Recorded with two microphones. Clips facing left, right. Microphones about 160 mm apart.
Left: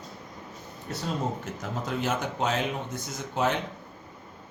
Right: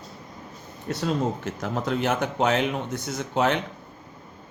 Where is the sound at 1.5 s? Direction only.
70° right (ahead or behind).